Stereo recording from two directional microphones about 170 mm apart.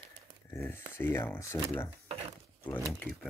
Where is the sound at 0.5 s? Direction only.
15° left (ahead or behind).